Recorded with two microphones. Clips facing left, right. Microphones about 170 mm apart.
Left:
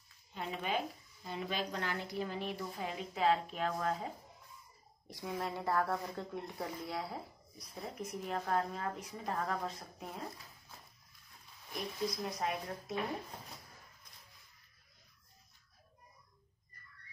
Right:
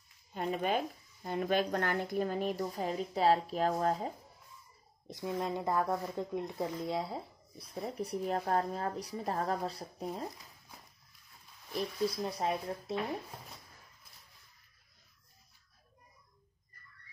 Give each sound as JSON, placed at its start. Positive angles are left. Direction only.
{"t": 0.3, "sound": "speech", "side_deg": -45}
{"t": 5.0, "sound": "a woman's voice", "side_deg": -20}
{"t": 11.7, "sound": "a woman's voice", "side_deg": -30}